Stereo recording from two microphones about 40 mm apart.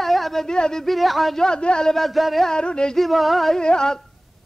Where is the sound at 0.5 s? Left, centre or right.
Centre.